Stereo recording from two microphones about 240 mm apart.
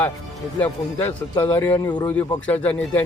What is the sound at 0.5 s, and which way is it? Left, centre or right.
Speech, centre.